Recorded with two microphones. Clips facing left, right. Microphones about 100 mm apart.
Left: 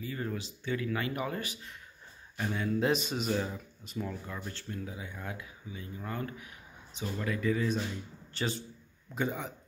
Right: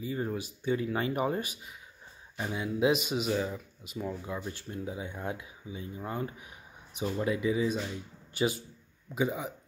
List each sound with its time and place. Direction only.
0.0 s speech: 20° right (ahead or behind)
2.3 s speech: 15° right (ahead or behind)
4.5 s speech: 20° right (ahead or behind)